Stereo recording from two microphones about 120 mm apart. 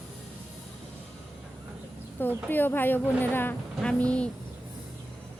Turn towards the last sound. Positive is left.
turn(degrees=10)  # may be behind; listen again after turning